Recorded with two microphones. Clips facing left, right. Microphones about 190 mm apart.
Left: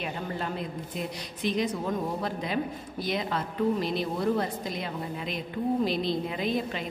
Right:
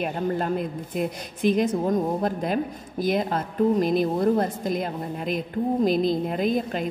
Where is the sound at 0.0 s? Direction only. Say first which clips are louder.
Right 7 dB; 50° right (ahead or behind).